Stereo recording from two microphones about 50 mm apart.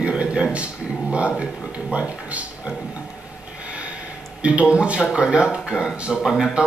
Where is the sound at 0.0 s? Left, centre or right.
Right.